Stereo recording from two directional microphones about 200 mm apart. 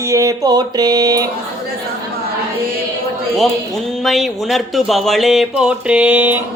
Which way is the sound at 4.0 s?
Centre (ahead or behind).